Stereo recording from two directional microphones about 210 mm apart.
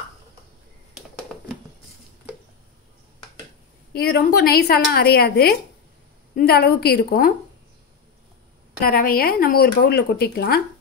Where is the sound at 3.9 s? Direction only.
50° left (ahead or behind).